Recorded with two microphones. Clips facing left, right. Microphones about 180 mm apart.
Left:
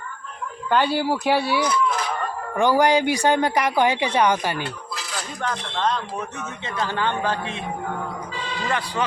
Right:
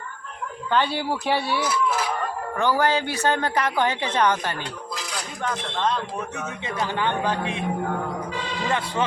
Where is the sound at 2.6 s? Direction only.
15° left (ahead or behind).